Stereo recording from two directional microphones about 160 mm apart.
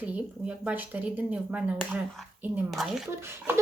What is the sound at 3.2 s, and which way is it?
Speech, 15° right (ahead or behind).